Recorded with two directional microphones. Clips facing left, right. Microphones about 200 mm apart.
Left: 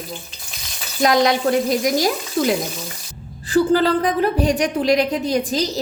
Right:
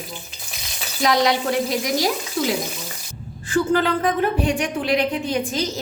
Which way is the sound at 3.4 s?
35° left (ahead or behind).